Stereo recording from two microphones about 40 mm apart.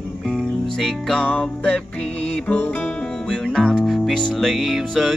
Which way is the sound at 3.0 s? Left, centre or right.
Centre.